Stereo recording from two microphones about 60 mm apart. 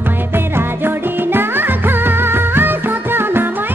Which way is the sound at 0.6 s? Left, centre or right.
Right.